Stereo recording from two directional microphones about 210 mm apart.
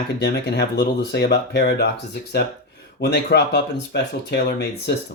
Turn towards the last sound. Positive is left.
turn(degrees=50)  # may be behind; listen again after turning